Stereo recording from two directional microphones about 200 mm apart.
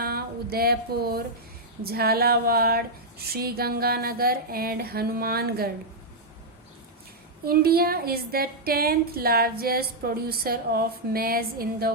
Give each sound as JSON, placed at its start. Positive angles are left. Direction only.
{"t": 0.0, "sound": "a sound", "side_deg": -50}
{"t": 1.8, "sound": "a woman's voice", "side_deg": -50}
{"t": 7.4, "sound": "a woman's voice", "side_deg": -50}